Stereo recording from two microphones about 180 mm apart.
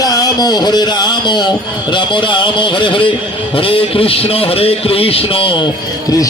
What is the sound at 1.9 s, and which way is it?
A man's voice, 25° left (ahead or behind).